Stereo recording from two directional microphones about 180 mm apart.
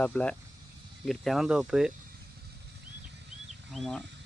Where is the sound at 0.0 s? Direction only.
5° left (ahead or behind).